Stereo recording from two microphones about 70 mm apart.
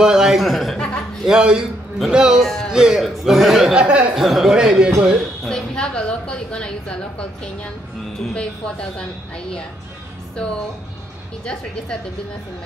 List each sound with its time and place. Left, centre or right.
0.0 s speech: centre
0.7 s chuckle: centre
1.2 s a man's voice: centre
3.8 s a man's voice: centre
4.1 s a man's voice: centre
5.5 s a woman's voice: centre
11.4 s a woman's voice: centre